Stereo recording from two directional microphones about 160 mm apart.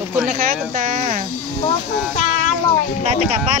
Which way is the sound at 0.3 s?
65° right (ahead or behind).